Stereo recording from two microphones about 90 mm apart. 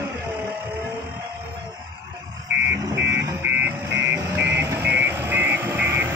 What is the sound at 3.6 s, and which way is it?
Vehicle, 25° right (ahead or behind).